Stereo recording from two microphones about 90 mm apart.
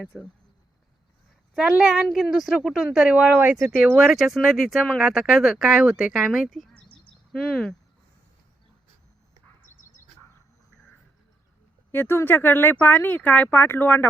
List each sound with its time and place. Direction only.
0.1 s speech: centre (ahead or behind)
1.8 s speech: 5° right (ahead or behind)
3.9 s speech: 5° right (ahead or behind)
6.8 s bird: 65° left (ahead or behind)
7.3 s speech: 5° left (ahead or behind)
11.9 s speech: 25° left (ahead or behind)